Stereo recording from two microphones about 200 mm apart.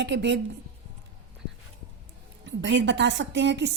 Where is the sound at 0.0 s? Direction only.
60° right (ahead or behind).